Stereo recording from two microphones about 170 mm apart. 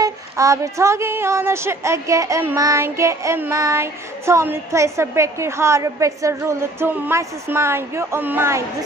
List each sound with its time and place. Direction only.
0.0 s a woman's voice: 20° right (ahead or behind)